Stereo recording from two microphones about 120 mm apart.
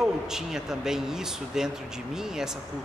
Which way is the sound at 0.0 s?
5° right (ahead or behind).